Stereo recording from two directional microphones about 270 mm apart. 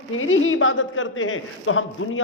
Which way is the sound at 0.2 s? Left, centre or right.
Left.